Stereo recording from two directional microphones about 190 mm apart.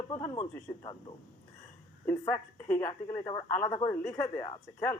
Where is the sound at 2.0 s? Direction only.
15° left (ahead or behind).